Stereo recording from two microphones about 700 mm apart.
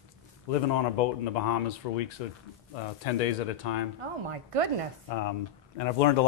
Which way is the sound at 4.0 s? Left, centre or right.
Right.